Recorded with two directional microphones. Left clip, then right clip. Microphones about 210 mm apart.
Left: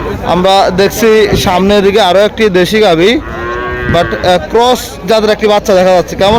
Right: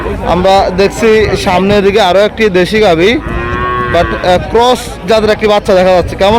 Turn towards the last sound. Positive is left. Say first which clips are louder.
# even
turn(degrees=5)  # may be behind; listen again after turning